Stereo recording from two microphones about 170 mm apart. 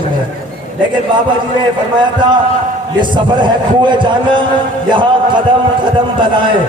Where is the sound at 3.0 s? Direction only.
25° right (ahead or behind).